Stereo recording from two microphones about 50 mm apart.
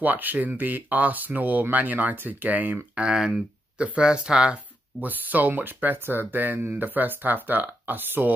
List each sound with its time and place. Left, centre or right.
0.0 s speech: right
3.0 s speech: centre
5.0 s speech: right